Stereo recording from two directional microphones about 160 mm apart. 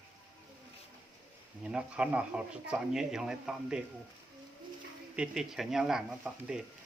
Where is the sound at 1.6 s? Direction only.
5° right (ahead or behind).